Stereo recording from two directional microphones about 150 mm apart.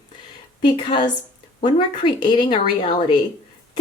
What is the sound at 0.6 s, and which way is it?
Speech, 35° left (ahead or behind).